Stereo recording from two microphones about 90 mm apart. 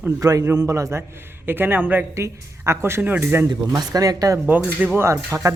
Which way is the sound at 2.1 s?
30° right (ahead or behind).